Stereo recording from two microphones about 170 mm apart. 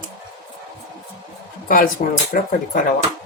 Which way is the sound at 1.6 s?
55° left (ahead or behind).